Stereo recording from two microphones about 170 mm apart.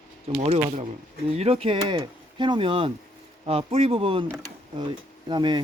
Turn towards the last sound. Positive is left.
turn(degrees=-30)  # may be behind; listen again after turning